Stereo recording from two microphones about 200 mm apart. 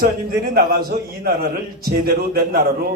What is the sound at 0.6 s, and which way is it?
A man's voice, 50° right (ahead or behind).